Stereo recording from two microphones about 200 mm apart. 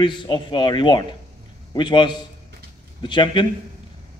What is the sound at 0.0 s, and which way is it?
A man's voice, 25° left (ahead or behind).